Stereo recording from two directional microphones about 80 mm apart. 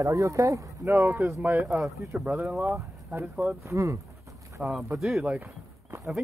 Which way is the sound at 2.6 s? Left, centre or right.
Right.